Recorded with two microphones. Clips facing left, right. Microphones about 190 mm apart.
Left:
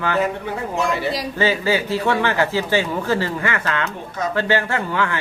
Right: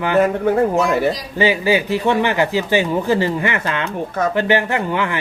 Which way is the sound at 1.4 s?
15° right (ahead or behind).